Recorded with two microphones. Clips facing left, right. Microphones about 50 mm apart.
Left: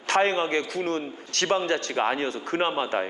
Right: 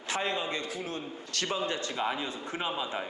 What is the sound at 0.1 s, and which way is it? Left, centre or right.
A man's voice, left.